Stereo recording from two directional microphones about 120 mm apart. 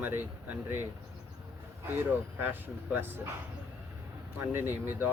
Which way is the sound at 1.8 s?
15° right (ahead or behind).